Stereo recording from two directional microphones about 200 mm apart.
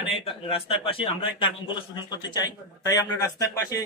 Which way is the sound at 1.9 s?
20° left (ahead or behind).